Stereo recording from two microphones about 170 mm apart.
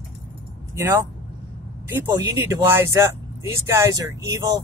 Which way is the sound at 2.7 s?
15° right (ahead or behind).